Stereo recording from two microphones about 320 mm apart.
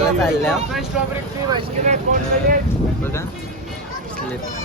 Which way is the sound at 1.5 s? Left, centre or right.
Centre.